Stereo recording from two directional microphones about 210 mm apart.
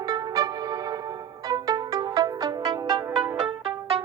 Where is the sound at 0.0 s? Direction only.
20° right (ahead or behind).